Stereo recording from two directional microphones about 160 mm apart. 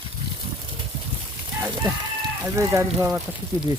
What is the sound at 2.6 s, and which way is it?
Speech, 20° right (ahead or behind).